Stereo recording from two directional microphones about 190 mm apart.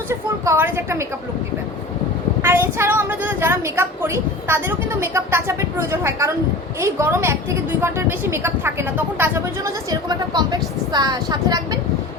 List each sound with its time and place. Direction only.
0.1 s a woman's voice: 15° right (ahead or behind)
2.4 s a woman's voice: 15° right (ahead or behind)